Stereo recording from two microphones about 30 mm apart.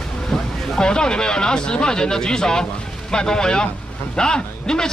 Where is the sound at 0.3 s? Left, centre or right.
Left.